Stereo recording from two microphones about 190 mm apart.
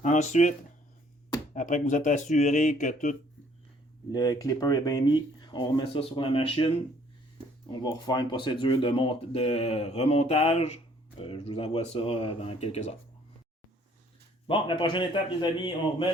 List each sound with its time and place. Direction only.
0.0 s speech: 40° left (ahead or behind)
1.5 s speech: 40° left (ahead or behind)
4.1 s speech: 20° left (ahead or behind)
7.7 s speech: 25° left (ahead or behind)
14.4 s speech: 25° left (ahead or behind)